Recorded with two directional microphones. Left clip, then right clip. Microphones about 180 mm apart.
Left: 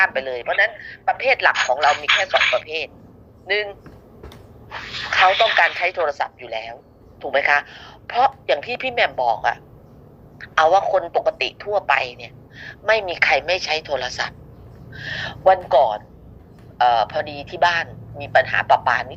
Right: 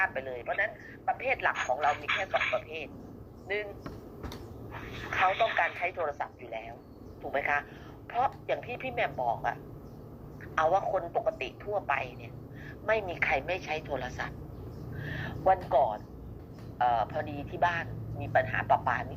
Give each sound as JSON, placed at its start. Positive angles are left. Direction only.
{"t": 0.0, "sound": "speech", "side_deg": 35}